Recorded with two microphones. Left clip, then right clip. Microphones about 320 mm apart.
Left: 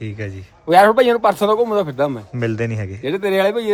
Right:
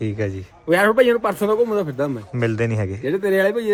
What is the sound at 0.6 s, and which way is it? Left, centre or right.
Speech, left.